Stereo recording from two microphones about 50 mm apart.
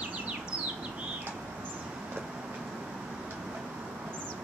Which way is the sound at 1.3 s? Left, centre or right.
Right.